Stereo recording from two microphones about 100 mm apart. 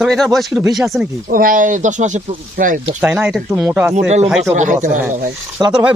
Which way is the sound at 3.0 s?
15° right (ahead or behind).